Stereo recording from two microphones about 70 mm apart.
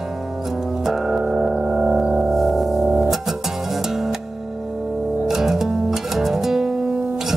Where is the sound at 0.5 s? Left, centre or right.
Centre.